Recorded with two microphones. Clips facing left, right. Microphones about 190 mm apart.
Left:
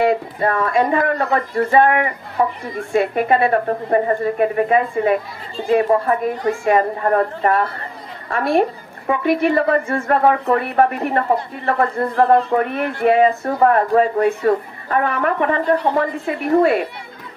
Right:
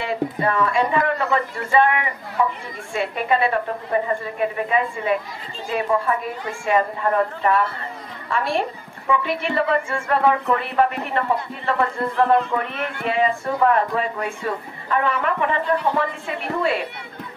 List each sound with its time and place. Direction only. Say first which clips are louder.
0.0 s speech: left 5 dB; 45° left (ahead or behind)
10.6 s speech: left 4 dB; 50° left (ahead or behind)
11.3 s speech: left 3 dB; 40° left (ahead or behind)